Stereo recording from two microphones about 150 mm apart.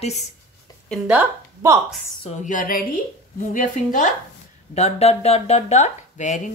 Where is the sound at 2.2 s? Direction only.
55° left (ahead or behind).